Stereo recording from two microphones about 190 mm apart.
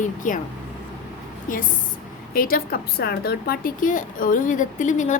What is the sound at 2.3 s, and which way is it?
A woman's voice, 50° left (ahead or behind).